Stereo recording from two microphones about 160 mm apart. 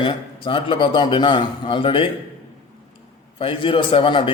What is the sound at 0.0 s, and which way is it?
A man's voice, 30° left (ahead or behind).